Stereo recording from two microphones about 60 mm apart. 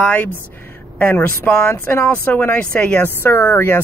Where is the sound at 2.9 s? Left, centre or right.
Left.